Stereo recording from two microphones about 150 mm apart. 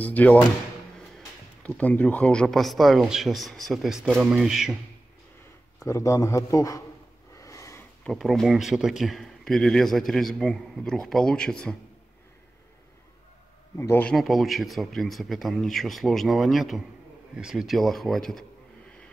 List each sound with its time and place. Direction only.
0.0 s speech: 10° left (ahead or behind)
1.8 s speech: 10° left (ahead or behind)
5.8 s a man's voice: 20° left (ahead or behind)
7.3 s snort: 20° left (ahead or behind)
8.0 s speech: centre (ahead or behind)
13.7 s speech: 15° left (ahead or behind)
14.1 s speech: centre (ahead or behind)